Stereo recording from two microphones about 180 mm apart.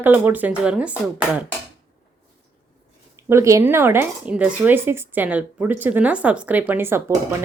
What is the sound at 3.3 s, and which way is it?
Speech, 15° right (ahead or behind).